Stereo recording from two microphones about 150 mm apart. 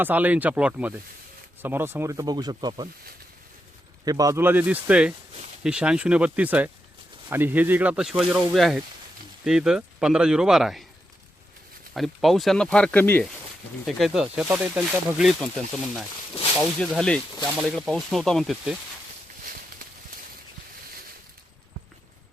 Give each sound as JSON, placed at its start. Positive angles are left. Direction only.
{"t": 0.0, "sound": "speech", "side_deg": -10}
{"t": 4.0, "sound": "speech", "side_deg": -25}
{"t": 11.9, "sound": "speech", "side_deg": 0}
{"t": 13.8, "sound": "speech", "side_deg": 0}
{"t": 14.4, "sound": "speech", "side_deg": -15}
{"t": 15.2, "sound": "speech", "side_deg": 0}
{"t": 19.5, "sound": "a sound", "side_deg": -65}